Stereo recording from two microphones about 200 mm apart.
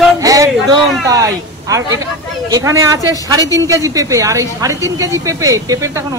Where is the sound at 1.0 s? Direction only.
15° right (ahead or behind).